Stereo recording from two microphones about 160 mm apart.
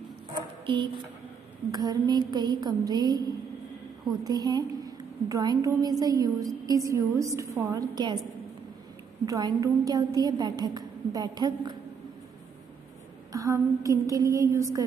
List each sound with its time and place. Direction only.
1.7 s a woman's voice: 25° right (ahead or behind)
9.2 s a woman's voice: 20° right (ahead or behind)
13.3 s a woman's voice: 20° right (ahead or behind)